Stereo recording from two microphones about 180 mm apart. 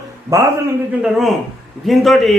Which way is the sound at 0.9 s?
5° right (ahead or behind).